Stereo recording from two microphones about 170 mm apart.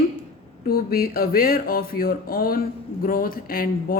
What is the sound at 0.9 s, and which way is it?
Speech, 65° left (ahead or behind).